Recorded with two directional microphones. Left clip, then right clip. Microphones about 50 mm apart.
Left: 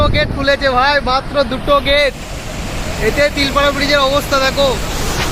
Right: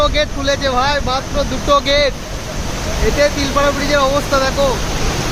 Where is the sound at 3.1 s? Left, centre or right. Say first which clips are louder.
Left 1 dB; left.